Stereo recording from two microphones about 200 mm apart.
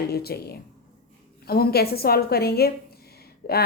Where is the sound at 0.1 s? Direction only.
50° left (ahead or behind).